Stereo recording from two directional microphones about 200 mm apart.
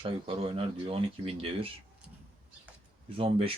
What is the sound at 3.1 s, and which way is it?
Speech, 25° right (ahead or behind).